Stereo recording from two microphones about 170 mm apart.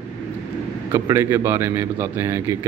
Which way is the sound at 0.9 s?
15° right (ahead or behind).